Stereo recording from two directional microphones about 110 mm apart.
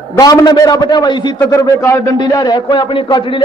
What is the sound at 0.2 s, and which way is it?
A man's voice, 35° left (ahead or behind).